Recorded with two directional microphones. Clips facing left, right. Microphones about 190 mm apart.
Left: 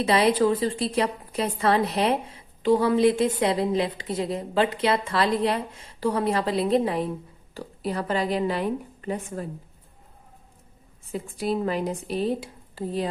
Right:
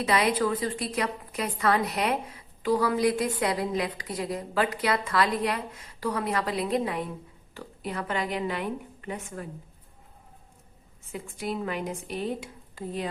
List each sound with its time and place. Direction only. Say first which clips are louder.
0.0 s a woman's voice: left 5 dB; 30° left (ahead or behind)
11.1 s a woman's voice: left 6 dB; 35° left (ahead or behind)